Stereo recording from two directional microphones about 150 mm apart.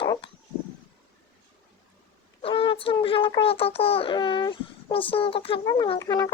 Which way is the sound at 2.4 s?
35° left (ahead or behind).